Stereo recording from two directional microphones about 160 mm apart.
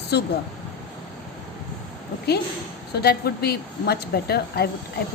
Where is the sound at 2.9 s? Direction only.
85° left.